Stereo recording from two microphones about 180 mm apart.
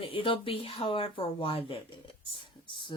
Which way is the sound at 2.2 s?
25° left (ahead or behind).